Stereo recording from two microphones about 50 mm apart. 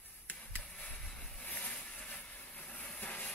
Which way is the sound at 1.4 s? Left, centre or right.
Left.